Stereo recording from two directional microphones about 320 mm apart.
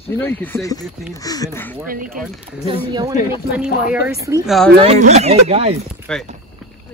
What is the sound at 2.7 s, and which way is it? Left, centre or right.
Speech, centre.